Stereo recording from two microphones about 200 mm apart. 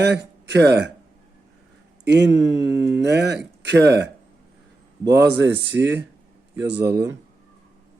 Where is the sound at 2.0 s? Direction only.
60° right (ahead or behind).